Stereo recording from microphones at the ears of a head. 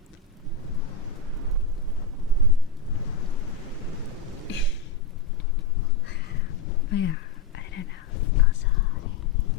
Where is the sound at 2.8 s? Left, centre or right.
Left.